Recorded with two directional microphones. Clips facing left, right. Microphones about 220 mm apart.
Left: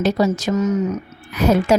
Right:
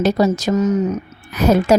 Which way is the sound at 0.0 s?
40° right (ahead or behind).